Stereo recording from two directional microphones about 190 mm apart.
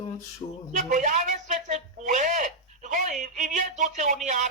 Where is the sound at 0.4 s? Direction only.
25° left (ahead or behind).